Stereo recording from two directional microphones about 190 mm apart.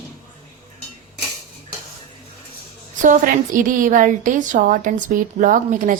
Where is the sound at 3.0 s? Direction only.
45° right (ahead or behind).